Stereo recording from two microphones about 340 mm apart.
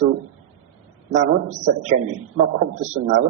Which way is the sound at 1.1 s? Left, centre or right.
Right.